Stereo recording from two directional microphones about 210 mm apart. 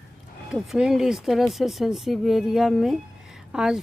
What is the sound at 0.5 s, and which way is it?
Speech, 5° right (ahead or behind).